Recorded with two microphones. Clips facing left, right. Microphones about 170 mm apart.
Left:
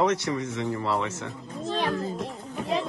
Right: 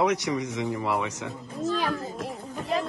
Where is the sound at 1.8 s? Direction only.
Centre (ahead or behind).